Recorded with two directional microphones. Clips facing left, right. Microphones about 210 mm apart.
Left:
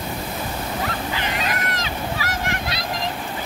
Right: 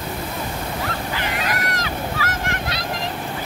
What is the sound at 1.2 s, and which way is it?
Waves, 20° left (ahead or behind).